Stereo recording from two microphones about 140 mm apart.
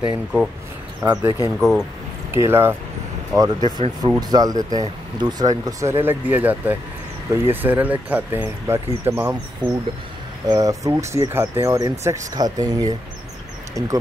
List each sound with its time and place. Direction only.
0.0 s speech: 5° right (ahead or behind)
1.0 s speech: 15° right (ahead or behind)
1.6 s speech: centre (ahead or behind)
2.3 s speech: 15° right (ahead or behind)
3.3 s speech: 30° right (ahead or behind); by 9.4 s 15° right (ahead or behind)
9.6 s speech: 30° right (ahead or behind)